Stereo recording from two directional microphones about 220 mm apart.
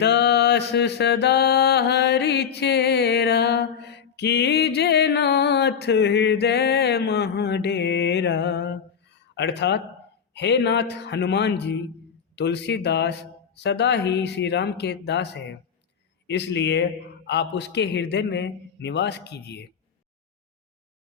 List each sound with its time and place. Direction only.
0.0 s mantra: 50° left (ahead or behind)
10.3 s a man's voice: 50° left (ahead or behind)